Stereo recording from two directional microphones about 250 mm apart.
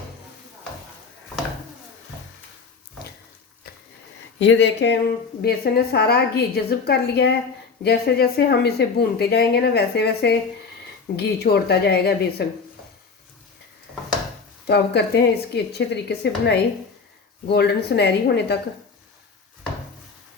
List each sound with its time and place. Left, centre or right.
4.4 s speech: left
14.7 s speech: left